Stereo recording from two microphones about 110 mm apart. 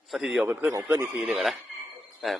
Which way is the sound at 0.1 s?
5° right (ahead or behind).